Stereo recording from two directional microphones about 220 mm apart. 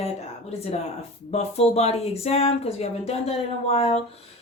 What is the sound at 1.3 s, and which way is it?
Speech, 30° left (ahead or behind).